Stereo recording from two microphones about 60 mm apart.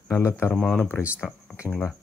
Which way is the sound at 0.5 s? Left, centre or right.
Centre.